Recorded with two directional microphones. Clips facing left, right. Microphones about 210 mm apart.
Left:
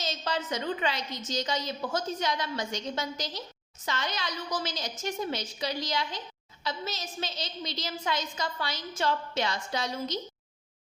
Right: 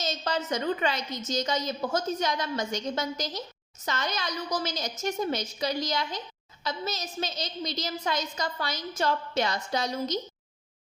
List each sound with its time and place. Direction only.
0.0 s a woman's voice: 45° right (ahead or behind)